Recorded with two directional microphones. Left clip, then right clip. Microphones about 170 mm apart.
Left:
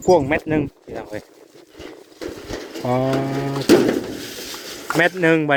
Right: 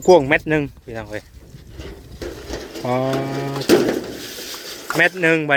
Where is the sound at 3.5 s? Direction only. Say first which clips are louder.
Left 1 dB; 60° left (ahead or behind).